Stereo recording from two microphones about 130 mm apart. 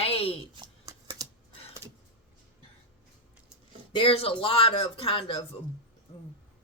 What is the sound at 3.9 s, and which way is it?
Speech, 45° left (ahead or behind).